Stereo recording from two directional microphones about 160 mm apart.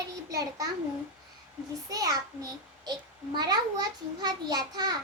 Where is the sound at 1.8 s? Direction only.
25° right (ahead or behind).